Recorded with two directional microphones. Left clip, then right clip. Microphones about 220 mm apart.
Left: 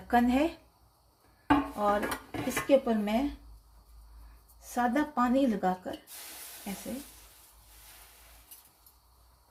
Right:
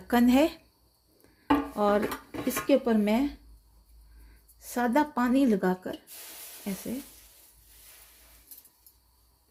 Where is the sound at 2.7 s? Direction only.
50° right (ahead or behind).